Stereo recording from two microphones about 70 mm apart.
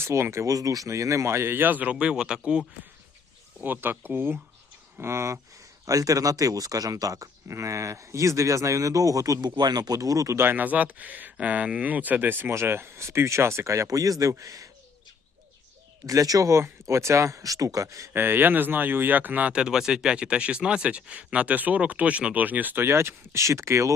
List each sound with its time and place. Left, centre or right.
0.0 s speech: right; by 2.6 s centre
3.6 s speech: right
4.9 s speech: right
5.8 s speech: right
9.6 s speech: right
10.3 s speech: right
16.0 s speech: right
18.1 s speech: right